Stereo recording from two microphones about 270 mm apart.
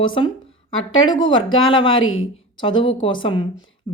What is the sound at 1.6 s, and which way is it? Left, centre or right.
Speech, centre.